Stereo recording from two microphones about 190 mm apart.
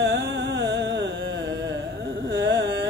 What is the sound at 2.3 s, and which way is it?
Carnatic music, 70° right (ahead or behind).